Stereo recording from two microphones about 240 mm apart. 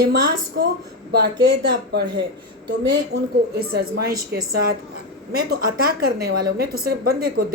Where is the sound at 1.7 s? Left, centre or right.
Right.